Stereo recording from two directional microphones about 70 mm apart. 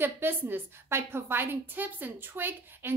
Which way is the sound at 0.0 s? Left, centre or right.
Right.